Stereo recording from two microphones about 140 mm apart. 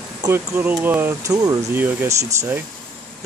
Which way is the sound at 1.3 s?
25° right (ahead or behind).